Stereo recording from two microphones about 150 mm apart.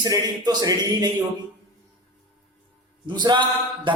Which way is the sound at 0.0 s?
25° right (ahead or behind).